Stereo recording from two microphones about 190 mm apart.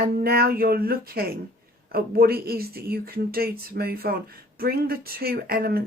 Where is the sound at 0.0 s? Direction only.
55° right (ahead or behind).